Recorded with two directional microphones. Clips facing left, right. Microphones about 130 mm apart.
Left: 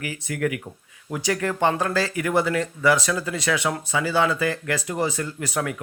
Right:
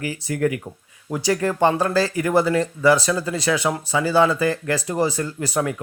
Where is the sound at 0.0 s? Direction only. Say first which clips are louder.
Right 4 dB; 35° right (ahead or behind).